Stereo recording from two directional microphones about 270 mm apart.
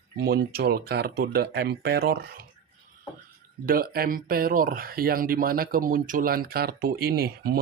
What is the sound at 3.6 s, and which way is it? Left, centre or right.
Speech, right.